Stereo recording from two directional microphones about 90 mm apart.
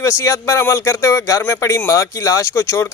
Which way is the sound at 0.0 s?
35° left (ahead or behind).